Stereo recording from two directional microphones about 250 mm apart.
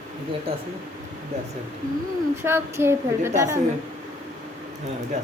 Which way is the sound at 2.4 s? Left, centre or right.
Centre.